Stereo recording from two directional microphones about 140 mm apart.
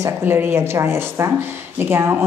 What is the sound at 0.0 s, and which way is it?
Speech, 15° right (ahead or behind).